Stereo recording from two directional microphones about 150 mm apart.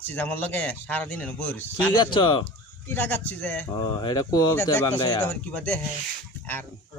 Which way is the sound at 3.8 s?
30° left (ahead or behind).